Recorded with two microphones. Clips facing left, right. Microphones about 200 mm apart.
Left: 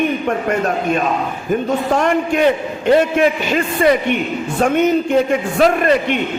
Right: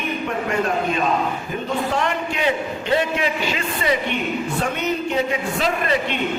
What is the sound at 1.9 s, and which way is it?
A man's voice, 50° left (ahead or behind).